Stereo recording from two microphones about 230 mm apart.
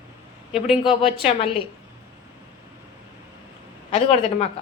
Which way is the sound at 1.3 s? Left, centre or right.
Left.